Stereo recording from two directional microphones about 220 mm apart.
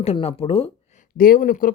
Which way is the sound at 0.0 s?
25° left (ahead or behind).